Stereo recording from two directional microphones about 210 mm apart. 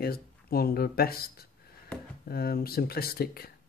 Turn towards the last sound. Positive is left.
turn(degrees=45)  # may be behind; listen again after turning